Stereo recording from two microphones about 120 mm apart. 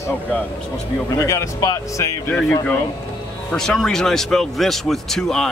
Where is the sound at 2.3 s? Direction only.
15° left (ahead or behind).